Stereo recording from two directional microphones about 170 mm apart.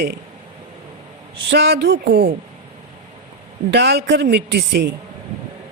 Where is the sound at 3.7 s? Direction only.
85° right.